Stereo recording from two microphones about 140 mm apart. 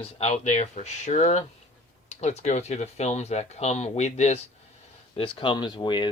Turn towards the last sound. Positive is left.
turn(degrees=35)  # may be behind; listen again after turning